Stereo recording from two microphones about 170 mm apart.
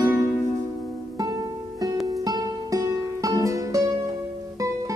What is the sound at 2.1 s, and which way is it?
Music, 20° right (ahead or behind).